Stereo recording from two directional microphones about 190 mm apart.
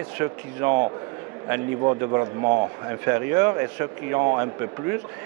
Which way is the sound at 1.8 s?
25° right (ahead or behind).